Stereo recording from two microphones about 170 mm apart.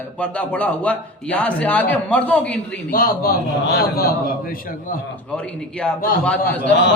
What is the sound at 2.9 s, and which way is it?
A man's voice, 55° left (ahead or behind).